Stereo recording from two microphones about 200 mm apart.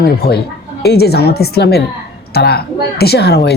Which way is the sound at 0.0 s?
50° left (ahead or behind).